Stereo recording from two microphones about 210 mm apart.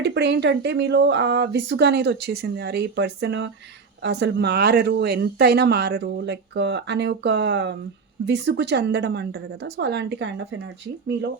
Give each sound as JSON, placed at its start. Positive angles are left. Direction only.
{"t": 0.0, "sound": "speech", "side_deg": -55}